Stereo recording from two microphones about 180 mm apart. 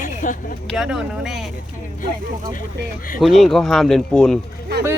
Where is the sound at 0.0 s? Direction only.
45° left (ahead or behind).